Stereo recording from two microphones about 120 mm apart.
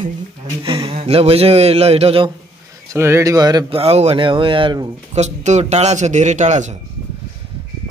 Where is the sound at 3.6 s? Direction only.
55° right (ahead or behind).